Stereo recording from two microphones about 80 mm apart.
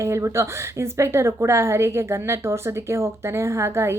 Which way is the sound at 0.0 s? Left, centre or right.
Right.